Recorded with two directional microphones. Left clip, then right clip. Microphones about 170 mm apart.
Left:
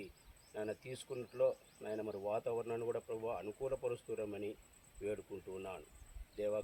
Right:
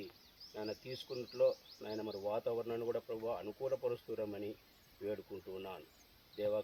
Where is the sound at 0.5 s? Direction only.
20° left (ahead or behind).